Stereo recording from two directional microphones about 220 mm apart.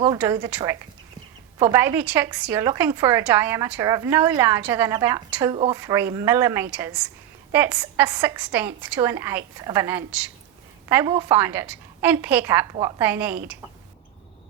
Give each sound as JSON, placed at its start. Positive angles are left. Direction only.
{"t": 0.2, "sound": "a woman's voice", "side_deg": -15}